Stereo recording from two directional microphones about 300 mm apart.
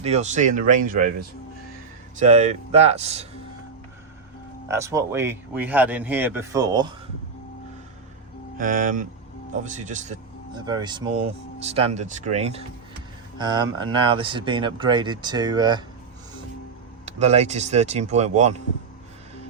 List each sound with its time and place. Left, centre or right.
0.0 s speech: right
2.1 s speech: right
4.7 s speech: centre
8.5 s speech: right
10.6 s speech: centre
17.1 s speech: right